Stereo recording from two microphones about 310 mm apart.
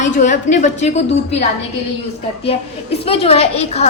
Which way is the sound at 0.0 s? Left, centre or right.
Left.